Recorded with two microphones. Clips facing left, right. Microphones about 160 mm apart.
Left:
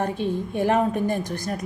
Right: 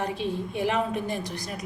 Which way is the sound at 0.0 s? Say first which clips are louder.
Left 4 dB; 50° left (ahead or behind).